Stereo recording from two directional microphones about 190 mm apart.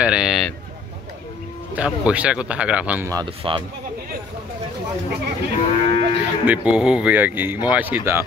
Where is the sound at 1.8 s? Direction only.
5° right (ahead or behind).